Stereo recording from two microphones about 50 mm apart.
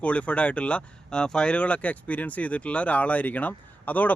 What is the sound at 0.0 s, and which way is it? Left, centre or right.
Speech, left.